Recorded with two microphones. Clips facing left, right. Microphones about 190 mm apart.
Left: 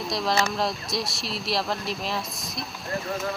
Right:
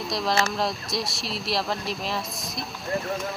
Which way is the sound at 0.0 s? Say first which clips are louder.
Even; centre (ahead or behind).